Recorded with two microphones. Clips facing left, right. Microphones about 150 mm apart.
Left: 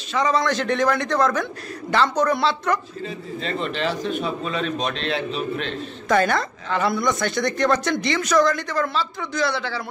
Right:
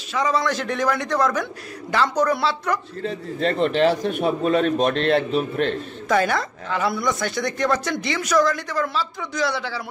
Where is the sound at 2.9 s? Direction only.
65° right (ahead or behind).